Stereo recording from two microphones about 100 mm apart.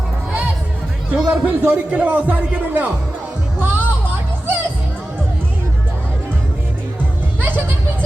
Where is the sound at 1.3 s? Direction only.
20° right (ahead or behind).